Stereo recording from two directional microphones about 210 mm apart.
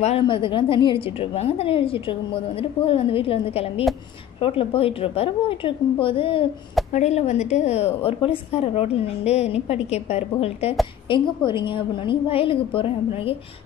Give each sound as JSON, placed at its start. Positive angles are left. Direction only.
{"t": 0.0, "sound": "a woman's voice", "side_deg": 25}